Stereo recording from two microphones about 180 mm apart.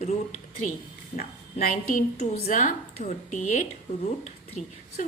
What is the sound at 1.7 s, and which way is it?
A woman's voice, 40° left (ahead or behind).